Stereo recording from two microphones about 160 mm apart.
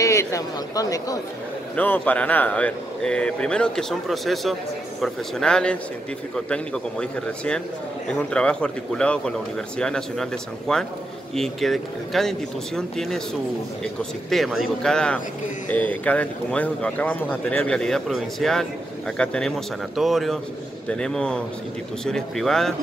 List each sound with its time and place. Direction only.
0.0 s speech: 20° left (ahead or behind)
1.8 s speech: 10° left (ahead or behind)